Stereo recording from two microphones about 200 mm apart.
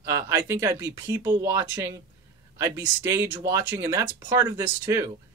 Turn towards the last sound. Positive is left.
turn(degrees=-15)  # may be behind; listen again after turning